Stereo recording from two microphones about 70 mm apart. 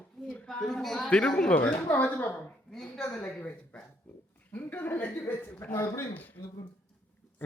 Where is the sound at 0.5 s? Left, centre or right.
Centre.